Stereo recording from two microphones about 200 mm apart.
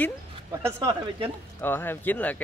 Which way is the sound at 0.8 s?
25° right (ahead or behind).